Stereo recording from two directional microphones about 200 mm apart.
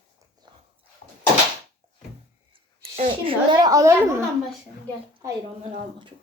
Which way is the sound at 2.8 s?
30° right (ahead or behind).